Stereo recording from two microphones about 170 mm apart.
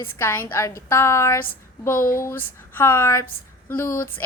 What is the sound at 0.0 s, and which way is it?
A woman's voice, 15° left (ahead or behind).